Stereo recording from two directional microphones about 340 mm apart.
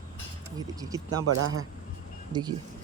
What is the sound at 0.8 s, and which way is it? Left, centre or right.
Speech, centre.